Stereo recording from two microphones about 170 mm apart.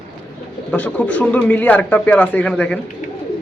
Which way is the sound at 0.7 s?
10° left (ahead or behind).